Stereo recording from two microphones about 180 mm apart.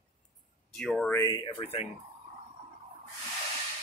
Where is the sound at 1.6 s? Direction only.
35° left (ahead or behind).